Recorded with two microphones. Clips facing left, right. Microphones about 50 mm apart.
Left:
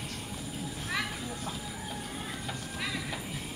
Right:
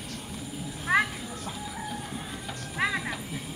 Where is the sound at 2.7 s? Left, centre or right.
Right.